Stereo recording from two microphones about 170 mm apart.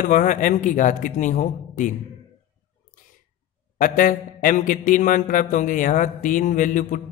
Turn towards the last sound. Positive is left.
turn(degrees=50)  # may be behind; listen again after turning